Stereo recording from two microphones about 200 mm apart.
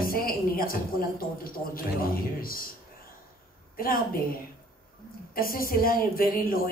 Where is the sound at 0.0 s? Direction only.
45° left (ahead or behind).